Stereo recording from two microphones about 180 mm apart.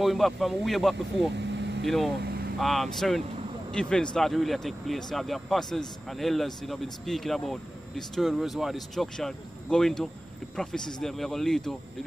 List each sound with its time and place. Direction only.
0.0 s speech: centre (ahead or behind)
1.3 s vehicle: 75° right (ahead or behind)
1.9 s speech: centre (ahead or behind)